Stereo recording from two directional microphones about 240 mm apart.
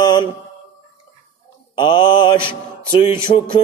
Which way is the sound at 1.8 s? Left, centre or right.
Centre.